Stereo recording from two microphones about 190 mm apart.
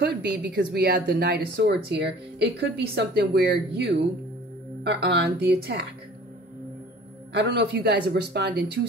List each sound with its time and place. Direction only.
0.0 s speech: 60° right (ahead or behind)
7.3 s speech: 60° right (ahead or behind)